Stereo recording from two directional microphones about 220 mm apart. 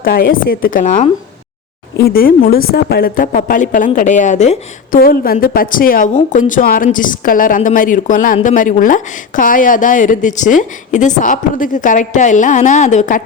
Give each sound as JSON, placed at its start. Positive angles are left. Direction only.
{"t": 0.0, "sound": "speech", "side_deg": 40}